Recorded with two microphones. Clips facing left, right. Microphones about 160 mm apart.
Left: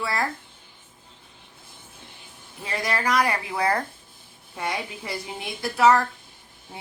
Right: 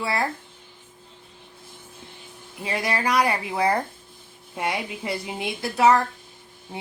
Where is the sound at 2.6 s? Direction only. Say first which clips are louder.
Right 1 dB; 15° right (ahead or behind).